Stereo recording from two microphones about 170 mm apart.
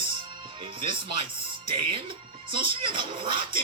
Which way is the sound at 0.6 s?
30° right (ahead or behind).